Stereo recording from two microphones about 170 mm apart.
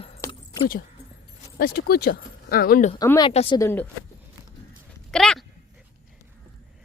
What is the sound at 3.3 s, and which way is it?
Speech, 35° left (ahead or behind).